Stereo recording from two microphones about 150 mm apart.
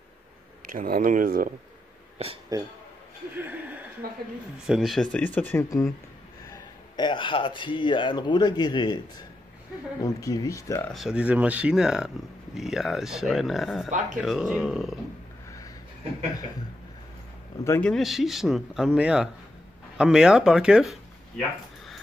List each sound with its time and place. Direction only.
0.7 s speech: 70° right (ahead or behind)
2.5 s a man's voice: 25° right (ahead or behind)
3.3 s speech: 10° right (ahead or behind)
4.0 s a woman's voice: 90° right
4.6 s speech: centre (ahead or behind); by 9.0 s 30° left (ahead or behind)
10.0 s speech: 20° left (ahead or behind)
10.9 s speech: centre (ahead or behind)
13.8 s speech: 55° right (ahead or behind)
14.2 s speech: 5° right (ahead or behind)
17.6 s speech: 10° left (ahead or behind)